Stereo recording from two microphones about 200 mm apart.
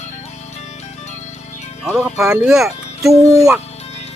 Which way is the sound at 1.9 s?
Centre (ahead or behind).